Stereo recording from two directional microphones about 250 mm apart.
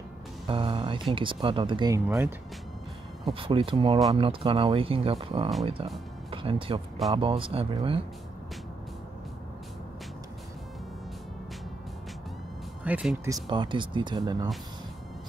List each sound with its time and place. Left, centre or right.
0.5 s speech: right
3.3 s speech: right
12.8 s speech: centre
13.3 s speech: centre